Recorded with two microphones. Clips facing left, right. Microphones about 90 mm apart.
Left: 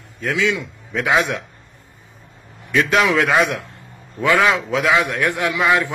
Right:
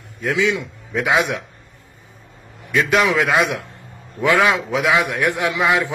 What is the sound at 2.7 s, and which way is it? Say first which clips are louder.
Speech: even; 5° right (ahead or behind).